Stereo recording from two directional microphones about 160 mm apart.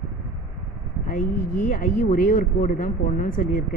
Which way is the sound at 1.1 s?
55° left (ahead or behind).